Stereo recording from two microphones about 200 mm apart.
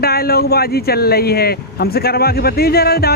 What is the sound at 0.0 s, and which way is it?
Speech, 50° left (ahead or behind).